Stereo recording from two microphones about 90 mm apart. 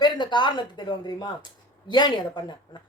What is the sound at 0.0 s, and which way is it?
Speech, 55° left (ahead or behind).